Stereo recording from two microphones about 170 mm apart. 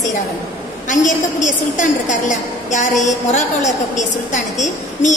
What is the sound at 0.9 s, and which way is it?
A woman's voice, 50° left (ahead or behind).